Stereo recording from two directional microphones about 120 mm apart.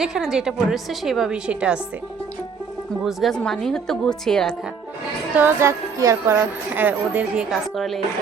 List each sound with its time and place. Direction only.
0.0 s a woman's voice: 5° right (ahead or behind)
3.0 s a woman's voice: centre (ahead or behind)
5.4 s speech: 20° right (ahead or behind)
7.5 s a woman's voice: centre (ahead or behind)